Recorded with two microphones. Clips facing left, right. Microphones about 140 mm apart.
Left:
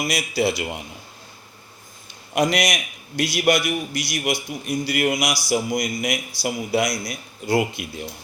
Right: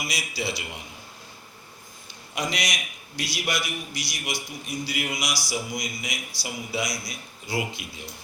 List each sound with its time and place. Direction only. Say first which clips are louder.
0.0 s a man's voice: left 9 dB; 55° left (ahead or behind)
2.3 s a man's voice: left 9 dB; 60° left (ahead or behind)